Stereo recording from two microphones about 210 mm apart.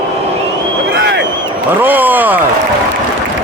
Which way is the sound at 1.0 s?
60° right (ahead or behind).